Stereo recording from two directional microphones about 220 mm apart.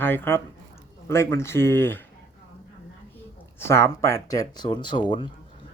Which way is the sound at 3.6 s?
10° left (ahead or behind).